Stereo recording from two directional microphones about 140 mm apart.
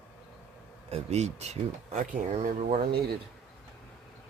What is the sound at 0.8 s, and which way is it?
Speech, 50° right (ahead or behind).